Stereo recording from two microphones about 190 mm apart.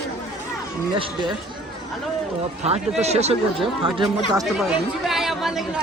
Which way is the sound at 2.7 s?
35° right (ahead or behind).